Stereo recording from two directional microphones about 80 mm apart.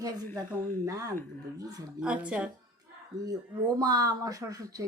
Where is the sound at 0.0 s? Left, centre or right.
Right.